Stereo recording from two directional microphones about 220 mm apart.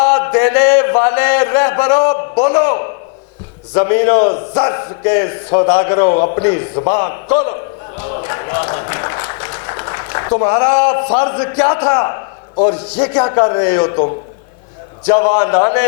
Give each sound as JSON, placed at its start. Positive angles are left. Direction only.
{"t": 0.0, "sound": "a man's voice", "side_deg": 15}
{"t": 6.1, "sound": "a man's voice", "side_deg": 30}
{"t": 8.0, "sound": "music", "side_deg": 25}
{"t": 12.5, "sound": "a man's voice", "side_deg": 25}